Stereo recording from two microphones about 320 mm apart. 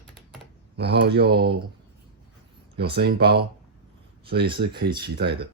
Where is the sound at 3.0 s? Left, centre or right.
Right.